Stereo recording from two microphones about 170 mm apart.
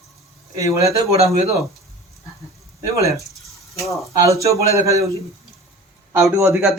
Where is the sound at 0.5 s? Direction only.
20° right (ahead or behind).